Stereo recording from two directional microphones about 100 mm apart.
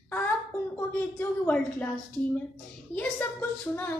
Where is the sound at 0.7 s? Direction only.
20° left (ahead or behind).